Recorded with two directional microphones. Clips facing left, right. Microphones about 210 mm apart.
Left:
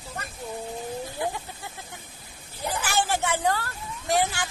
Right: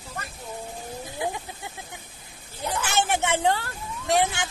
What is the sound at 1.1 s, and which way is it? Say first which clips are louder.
Snake: even; 15° right (ahead or behind).